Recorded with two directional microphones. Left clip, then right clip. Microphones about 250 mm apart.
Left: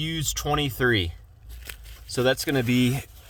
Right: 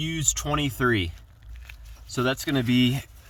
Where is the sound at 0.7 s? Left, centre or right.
Centre.